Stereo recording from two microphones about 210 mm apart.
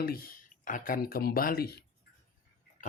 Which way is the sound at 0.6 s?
40° left (ahead or behind).